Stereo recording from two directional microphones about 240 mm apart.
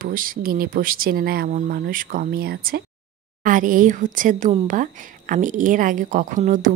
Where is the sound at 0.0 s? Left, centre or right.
Right.